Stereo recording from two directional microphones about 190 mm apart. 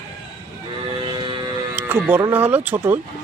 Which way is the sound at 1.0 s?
25° right (ahead or behind).